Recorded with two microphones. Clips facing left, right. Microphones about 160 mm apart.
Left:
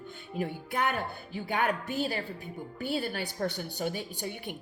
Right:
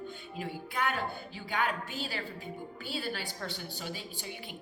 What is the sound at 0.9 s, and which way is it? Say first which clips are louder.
A woman's voice: left 2 dB; 55° left (ahead or behind).